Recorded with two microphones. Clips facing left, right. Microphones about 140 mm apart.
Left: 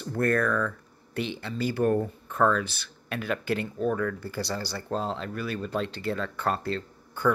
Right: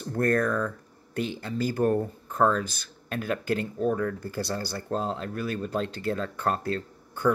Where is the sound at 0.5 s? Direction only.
20° right (ahead or behind).